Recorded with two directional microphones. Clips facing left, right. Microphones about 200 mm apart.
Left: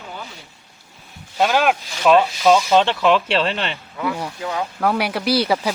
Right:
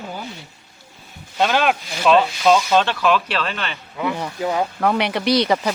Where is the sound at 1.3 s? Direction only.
5° left (ahead or behind); by 3.8 s 30° left (ahead or behind).